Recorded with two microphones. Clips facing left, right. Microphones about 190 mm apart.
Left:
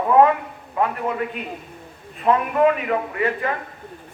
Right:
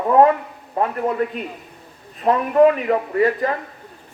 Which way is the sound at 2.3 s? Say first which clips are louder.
Right 3 dB; 35° right (ahead or behind).